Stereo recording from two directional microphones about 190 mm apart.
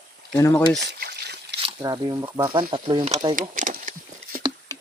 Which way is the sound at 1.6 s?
20° right (ahead or behind).